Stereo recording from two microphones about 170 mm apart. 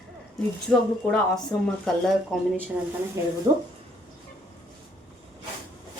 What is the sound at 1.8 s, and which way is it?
Speech, centre (ahead or behind).